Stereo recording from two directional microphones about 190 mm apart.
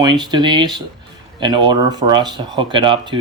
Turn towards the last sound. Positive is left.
turn(degrees=-25)  # may be behind; listen again after turning